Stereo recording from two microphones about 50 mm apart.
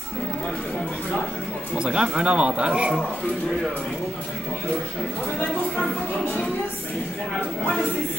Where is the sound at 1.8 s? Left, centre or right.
Centre.